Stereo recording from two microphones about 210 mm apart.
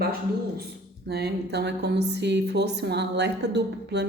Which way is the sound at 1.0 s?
50° right (ahead or behind).